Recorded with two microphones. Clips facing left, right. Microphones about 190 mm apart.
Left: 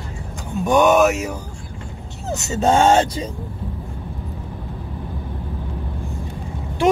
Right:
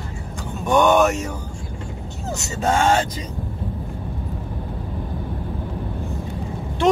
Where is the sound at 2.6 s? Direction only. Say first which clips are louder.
Left 4 dB; 30° left (ahead or behind).